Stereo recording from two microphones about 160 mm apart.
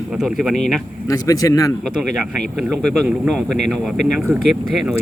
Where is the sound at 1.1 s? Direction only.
20° left (ahead or behind).